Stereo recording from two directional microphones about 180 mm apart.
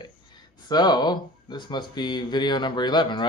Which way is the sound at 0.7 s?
25° left (ahead or behind).